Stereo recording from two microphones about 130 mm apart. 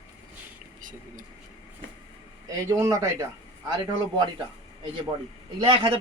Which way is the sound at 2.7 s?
25° right (ahead or behind).